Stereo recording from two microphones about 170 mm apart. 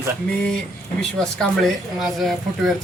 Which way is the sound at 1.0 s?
5° left (ahead or behind).